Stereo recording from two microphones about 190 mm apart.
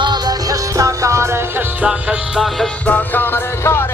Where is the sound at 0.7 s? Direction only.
15° right (ahead or behind).